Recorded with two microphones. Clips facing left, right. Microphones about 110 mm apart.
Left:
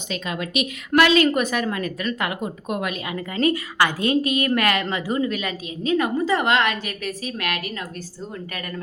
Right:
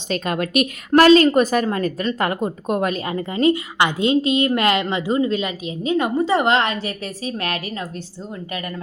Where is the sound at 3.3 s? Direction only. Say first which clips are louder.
Right 3 dB; 20° right (ahead or behind).